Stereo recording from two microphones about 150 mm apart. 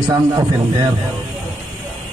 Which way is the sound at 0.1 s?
25° right (ahead or behind).